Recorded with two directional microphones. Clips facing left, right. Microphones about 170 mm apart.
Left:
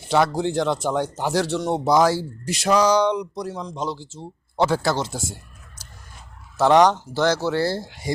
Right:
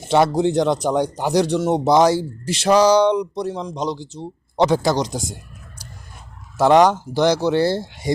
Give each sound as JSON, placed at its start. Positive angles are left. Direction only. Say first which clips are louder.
{"t": 0.1, "sound": "speech", "louder": "right 4 dB", "side_deg": -20}
{"t": 3.6, "sound": "speech", "louder": "right 4 dB", "side_deg": -15}
{"t": 5.8, "sound": "a sound", "louder": "right 7 dB", "side_deg": -10}
{"t": 6.6, "sound": "speech", "louder": "right 2 dB", "side_deg": -10}